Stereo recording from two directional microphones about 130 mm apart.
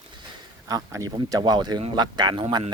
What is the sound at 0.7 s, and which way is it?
A man's voice, 25° right (ahead or behind).